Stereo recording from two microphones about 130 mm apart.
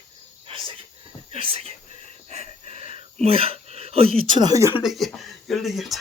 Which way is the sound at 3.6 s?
50° right (ahead or behind).